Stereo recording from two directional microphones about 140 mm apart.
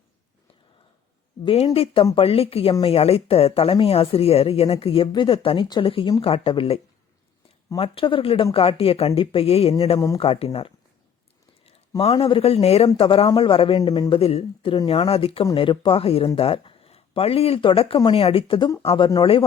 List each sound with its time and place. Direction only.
1.5 s speech: 45° left (ahead or behind)
7.8 s speech: 40° left (ahead or behind)